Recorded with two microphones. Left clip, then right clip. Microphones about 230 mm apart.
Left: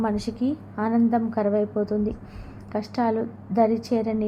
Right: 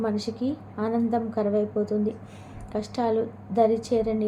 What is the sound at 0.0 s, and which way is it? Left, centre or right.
A woman's voice, centre.